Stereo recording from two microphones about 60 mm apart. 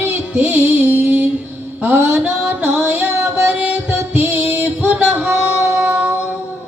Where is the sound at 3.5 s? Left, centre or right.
Centre.